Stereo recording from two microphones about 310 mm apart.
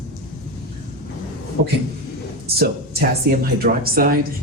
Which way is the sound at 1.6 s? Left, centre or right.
Right.